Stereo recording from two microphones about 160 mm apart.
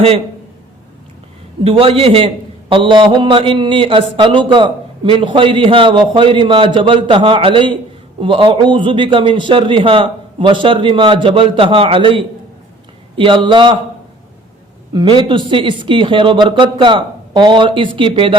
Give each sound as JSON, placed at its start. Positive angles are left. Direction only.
{"t": 1.6, "sound": "a man's voice", "side_deg": -35}
{"t": 14.9, "sound": "a man's voice", "side_deg": -30}